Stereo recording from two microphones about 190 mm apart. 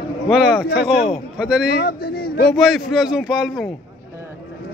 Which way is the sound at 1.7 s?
55° left (ahead or behind).